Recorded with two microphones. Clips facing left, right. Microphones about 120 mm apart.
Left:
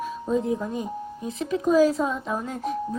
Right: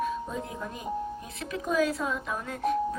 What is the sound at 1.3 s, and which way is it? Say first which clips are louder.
Speech: left 14 dB; 30° left (ahead or behind).